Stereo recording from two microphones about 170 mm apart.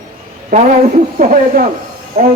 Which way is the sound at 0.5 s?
60° right (ahead or behind).